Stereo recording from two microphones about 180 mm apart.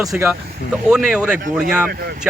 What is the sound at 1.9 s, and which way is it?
Speech, 55° right (ahead or behind).